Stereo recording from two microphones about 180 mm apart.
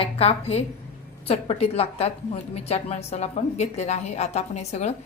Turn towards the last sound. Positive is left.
turn(degrees=40)  # may be behind; listen again after turning